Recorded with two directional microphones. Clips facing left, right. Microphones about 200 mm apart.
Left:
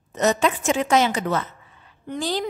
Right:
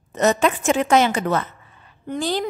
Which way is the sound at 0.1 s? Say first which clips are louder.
Right 2 dB; 55° right (ahead or behind).